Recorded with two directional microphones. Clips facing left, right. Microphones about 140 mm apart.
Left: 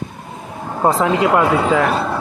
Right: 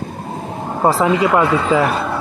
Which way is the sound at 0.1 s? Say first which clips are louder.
Right 6 dB; 35° right (ahead or behind).